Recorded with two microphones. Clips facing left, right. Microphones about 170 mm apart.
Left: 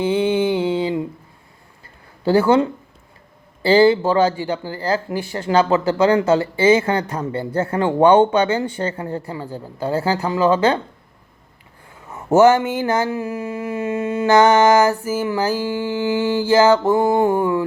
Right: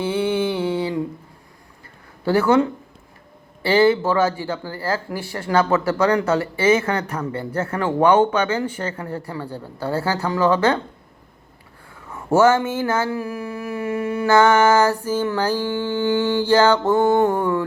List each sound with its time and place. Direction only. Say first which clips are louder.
0.0 s mantra: left 3 dB; 15° left (ahead or behind)
2.2 s speech: left 2 dB; 30° left (ahead or behind)
4.4 s speech: left 3 dB; 15° left (ahead or behind)
12.3 s mantra: left 3 dB; 10° left (ahead or behind)